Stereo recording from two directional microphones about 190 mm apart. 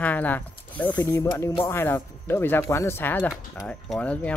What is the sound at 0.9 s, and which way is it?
Speech, 20° left (ahead or behind).